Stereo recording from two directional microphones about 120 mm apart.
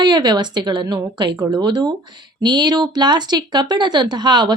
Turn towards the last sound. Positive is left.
turn(degrees=-40)  # may be behind; listen again after turning